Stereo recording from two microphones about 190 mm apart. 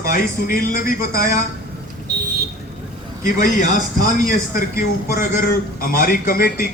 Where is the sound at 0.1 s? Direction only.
45° left (ahead or behind).